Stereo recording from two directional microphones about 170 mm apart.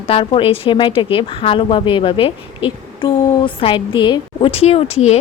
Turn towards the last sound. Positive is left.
turn(degrees=35)  # may be behind; listen again after turning